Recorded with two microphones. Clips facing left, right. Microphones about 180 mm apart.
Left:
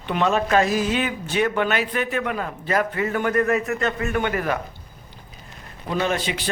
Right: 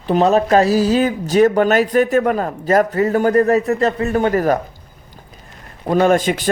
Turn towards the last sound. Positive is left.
turn(degrees=-45)  # may be behind; listen again after turning